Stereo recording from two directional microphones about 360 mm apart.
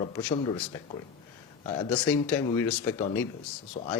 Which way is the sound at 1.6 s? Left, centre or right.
Centre.